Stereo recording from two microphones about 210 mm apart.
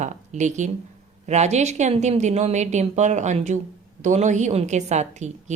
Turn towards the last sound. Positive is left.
turn(degrees=-35)  # may be behind; listen again after turning